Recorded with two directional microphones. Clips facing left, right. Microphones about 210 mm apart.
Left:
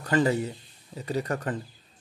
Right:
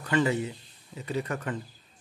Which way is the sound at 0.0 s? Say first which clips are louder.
Left 2 dB; 40° left (ahead or behind).